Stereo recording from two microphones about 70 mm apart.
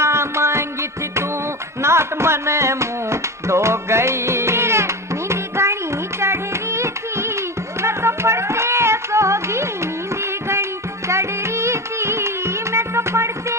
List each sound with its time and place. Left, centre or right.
0.0 s music: right
1.8 s a sound: right
6.1 s music: right
11.1 s music: right